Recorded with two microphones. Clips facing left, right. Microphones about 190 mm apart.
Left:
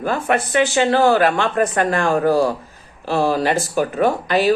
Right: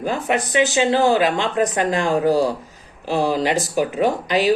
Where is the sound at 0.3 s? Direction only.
15° right (ahead or behind).